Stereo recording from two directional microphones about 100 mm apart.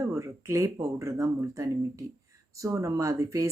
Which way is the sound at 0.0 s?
30° right (ahead or behind).